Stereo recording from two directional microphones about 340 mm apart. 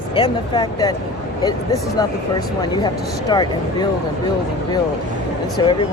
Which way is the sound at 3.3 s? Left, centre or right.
Centre.